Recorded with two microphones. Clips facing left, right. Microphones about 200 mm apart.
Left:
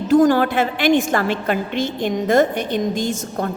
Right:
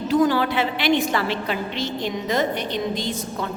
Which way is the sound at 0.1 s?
50° left (ahead or behind).